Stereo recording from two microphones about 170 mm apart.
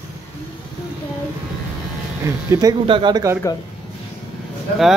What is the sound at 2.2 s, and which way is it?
Speech, 20° right (ahead or behind).